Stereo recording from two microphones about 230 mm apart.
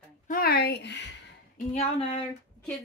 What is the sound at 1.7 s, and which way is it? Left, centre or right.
Speech, left.